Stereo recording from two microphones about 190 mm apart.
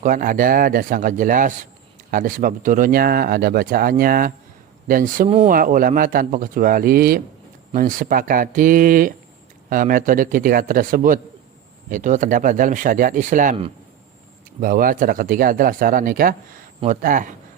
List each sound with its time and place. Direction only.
0.0 s speech: 45° right (ahead or behind)
14.6 s speech: 45° right (ahead or behind)